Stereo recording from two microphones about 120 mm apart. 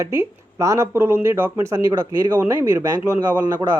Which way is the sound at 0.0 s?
25° right (ahead or behind).